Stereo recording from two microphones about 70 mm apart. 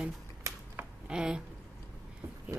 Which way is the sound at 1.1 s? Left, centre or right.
Centre.